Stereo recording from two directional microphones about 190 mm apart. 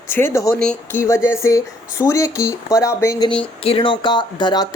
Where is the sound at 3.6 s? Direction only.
30° left (ahead or behind).